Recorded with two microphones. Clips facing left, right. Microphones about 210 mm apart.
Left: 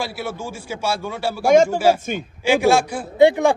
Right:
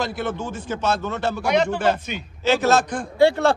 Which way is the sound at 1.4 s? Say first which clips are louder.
Left 8 dB; 45° left (ahead or behind).